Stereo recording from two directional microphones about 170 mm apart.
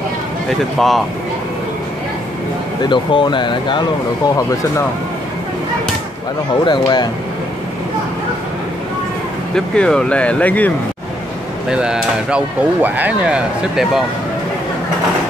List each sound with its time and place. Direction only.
0.7 s speech: centre (ahead or behind)
2.8 s speech: 30° left (ahead or behind)
6.6 s speech: 25° left (ahead or behind)
9.8 s speech: 5° left (ahead or behind)
11.7 s speech: 5° right (ahead or behind)